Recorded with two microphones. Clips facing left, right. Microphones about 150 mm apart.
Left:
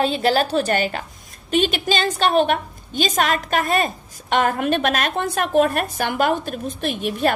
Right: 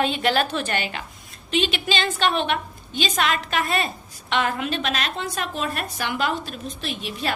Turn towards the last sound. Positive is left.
turn(degrees=50)  # may be behind; listen again after turning